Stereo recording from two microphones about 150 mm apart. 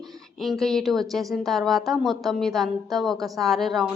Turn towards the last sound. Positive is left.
turn(degrees=0)  # may be behind; listen again after turning